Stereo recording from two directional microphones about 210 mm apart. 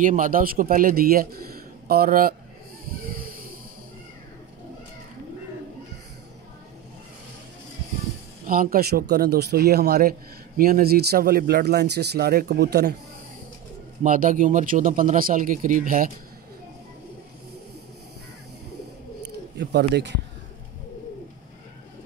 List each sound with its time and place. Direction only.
0.0 s a man's voice: 40° right (ahead or behind)
8.5 s a man's voice: 45° right (ahead or behind)
14.0 s speech: 40° right (ahead or behind)
19.6 s speech: 55° right (ahead or behind)